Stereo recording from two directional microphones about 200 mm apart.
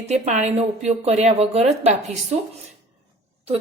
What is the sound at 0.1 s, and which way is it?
A woman's voice, 35° right (ahead or behind).